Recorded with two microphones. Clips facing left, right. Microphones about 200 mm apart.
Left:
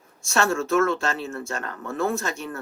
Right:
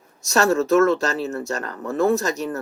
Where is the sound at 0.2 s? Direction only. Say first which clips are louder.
Right 5 dB; 40° right (ahead or behind).